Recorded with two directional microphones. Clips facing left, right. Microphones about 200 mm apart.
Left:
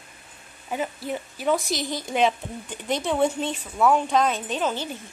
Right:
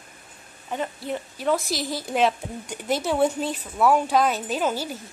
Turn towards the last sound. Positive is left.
turn(degrees=-5)  # may be behind; listen again after turning